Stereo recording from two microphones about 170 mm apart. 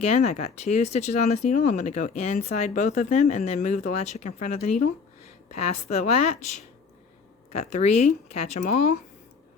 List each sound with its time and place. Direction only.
0.0 s speech: 40° left (ahead or behind)
7.5 s speech: 40° left (ahead or behind)